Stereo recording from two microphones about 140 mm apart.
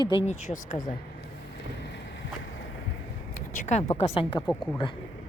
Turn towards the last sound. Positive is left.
turn(degrees=5)  # may be behind; listen again after turning